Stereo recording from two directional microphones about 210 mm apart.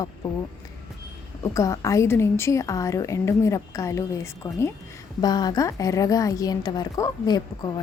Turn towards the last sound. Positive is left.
turn(degrees=20)  # may be behind; listen again after turning